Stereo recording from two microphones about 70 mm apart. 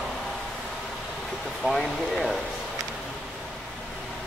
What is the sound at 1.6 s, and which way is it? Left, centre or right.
Speech, centre.